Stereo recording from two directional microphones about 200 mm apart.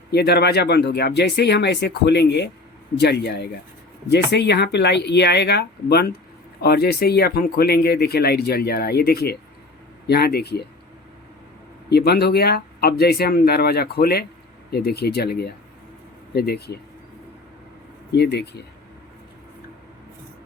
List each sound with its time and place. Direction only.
0.1 s speech: 55° left (ahead or behind)
11.9 s speech: 55° left (ahead or behind)
18.1 s speech: 55° left (ahead or behind)